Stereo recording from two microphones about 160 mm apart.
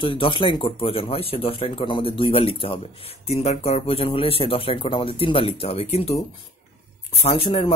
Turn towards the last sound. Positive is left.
turn(degrees=35)  # may be behind; listen again after turning